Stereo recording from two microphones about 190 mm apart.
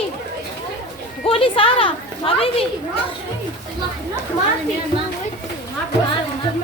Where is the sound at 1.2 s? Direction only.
30° left (ahead or behind).